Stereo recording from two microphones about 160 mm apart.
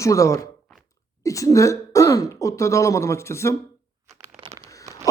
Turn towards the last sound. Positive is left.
turn(degrees=15)  # may be behind; listen again after turning